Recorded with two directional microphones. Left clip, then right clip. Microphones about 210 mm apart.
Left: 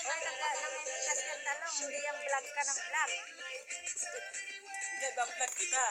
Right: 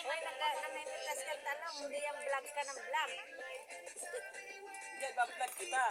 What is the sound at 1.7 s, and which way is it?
Speech, 45° left (ahead or behind).